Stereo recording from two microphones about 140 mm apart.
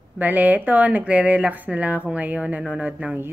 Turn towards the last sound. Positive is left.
turn(degrees=-10)  # may be behind; listen again after turning